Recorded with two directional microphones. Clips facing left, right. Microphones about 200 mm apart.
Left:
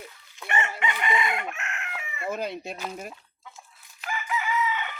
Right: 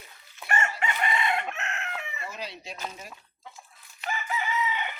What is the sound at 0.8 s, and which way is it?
Chicken, 40° right (ahead or behind).